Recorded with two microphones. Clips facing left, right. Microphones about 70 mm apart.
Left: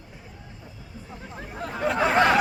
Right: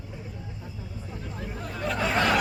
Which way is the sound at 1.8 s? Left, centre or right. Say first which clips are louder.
Left 5 dB; left.